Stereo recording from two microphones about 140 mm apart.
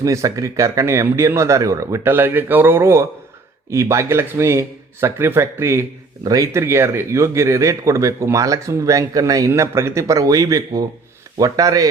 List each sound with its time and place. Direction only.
0.0 s a man's voice: 25° right (ahead or behind)